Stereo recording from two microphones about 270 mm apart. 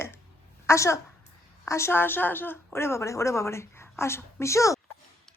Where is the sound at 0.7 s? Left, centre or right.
Centre.